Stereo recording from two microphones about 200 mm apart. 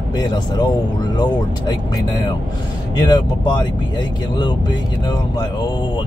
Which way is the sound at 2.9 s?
20° left (ahead or behind).